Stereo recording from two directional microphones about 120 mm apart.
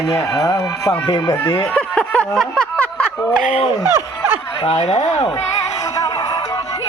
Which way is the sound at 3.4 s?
70° left (ahead or behind).